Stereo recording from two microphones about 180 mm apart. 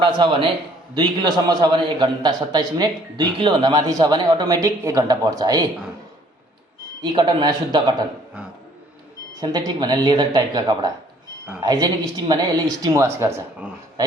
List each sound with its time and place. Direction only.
0.0 s a man's voice: 25° right (ahead or behind)
7.0 s a man's voice: 25° right (ahead or behind)
9.3 s a man's voice: 20° right (ahead or behind)